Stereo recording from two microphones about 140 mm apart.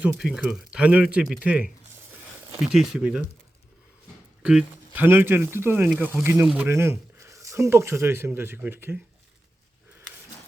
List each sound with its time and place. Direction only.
0.2 s speech: 5° right (ahead or behind)
2.7 s speech: 5° right (ahead or behind)
4.4 s speech: 10° right (ahead or behind)